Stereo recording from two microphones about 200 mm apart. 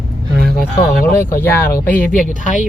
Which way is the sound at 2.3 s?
40° left (ahead or behind).